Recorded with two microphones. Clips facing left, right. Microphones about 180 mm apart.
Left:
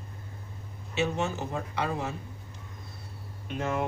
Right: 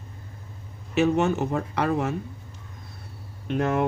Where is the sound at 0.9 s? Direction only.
65° right (ahead or behind).